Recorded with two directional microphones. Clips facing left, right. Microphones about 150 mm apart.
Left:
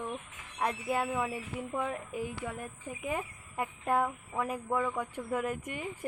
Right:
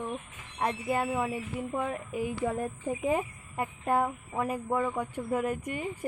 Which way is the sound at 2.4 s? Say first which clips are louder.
Right 9 dB; 35° right (ahead or behind).